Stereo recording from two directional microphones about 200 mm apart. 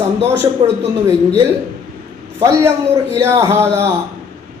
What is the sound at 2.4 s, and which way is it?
A man's voice, 15° right (ahead or behind).